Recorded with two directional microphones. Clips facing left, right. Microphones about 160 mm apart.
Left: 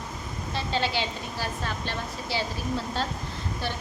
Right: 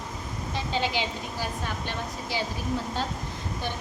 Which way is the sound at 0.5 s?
15° right (ahead or behind).